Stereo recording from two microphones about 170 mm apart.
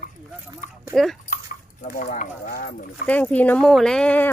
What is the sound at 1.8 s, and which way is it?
Speech, 50° left (ahead or behind).